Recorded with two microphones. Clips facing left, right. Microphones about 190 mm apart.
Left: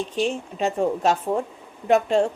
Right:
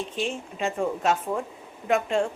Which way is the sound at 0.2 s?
40° left (ahead or behind).